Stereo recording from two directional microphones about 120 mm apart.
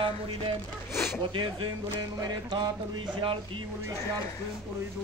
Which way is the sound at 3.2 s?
45° right (ahead or behind).